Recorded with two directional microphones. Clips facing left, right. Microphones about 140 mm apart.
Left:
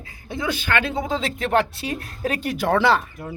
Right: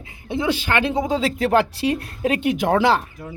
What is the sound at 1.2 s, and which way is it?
Speech, 35° right (ahead or behind).